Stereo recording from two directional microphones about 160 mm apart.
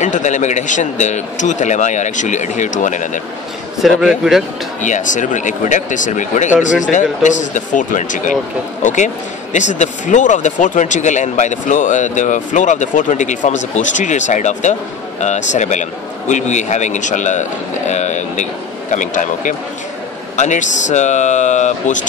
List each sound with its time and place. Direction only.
0.0 s speech: 50° left (ahead or behind)
3.8 s a man's voice: centre (ahead or behind)
4.8 s speech: 50° left (ahead or behind)